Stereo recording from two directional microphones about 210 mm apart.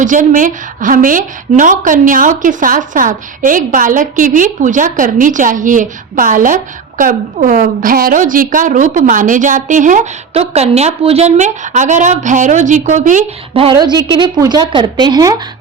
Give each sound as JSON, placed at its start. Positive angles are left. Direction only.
{"t": 0.0, "sound": "a woman's voice", "side_deg": -35}